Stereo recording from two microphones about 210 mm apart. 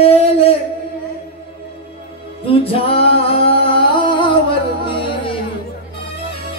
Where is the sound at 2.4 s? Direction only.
25° left (ahead or behind).